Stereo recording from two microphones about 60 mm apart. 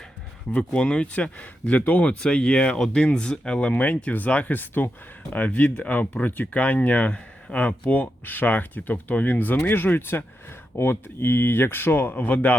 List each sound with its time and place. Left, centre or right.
0.5 s speech: centre
2.2 s speech: centre